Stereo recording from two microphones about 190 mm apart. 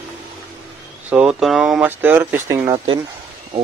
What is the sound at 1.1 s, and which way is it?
Speech, centre (ahead or behind).